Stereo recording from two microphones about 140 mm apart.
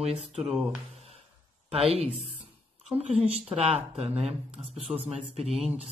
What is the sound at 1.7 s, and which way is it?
Speech, 45° right (ahead or behind).